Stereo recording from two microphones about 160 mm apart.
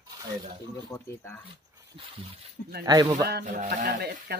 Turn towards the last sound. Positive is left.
turn(degrees=-75)  # may be behind; listen again after turning